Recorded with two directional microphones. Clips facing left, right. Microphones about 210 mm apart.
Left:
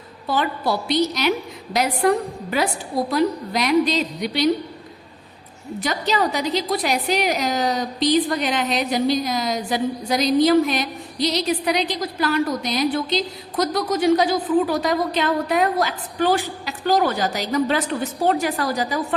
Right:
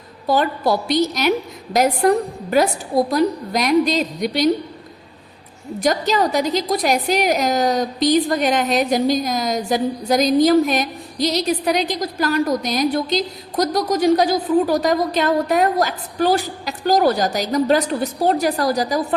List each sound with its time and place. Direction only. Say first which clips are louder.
0.3 s a woman's voice: right 4 dB; 45° right (ahead or behind)
5.8 s a woman's voice: right 4 dB; 45° right (ahead or behind)